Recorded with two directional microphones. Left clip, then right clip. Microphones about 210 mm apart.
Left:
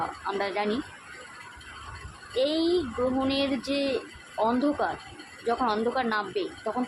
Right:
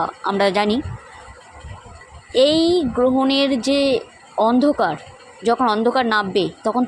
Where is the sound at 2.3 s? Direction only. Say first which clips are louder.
Right 10 dB; 40° right (ahead or behind).